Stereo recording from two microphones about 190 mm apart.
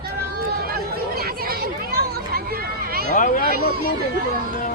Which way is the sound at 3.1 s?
45° left (ahead or behind).